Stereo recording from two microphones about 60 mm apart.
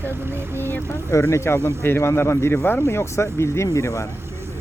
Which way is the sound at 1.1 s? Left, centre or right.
Left.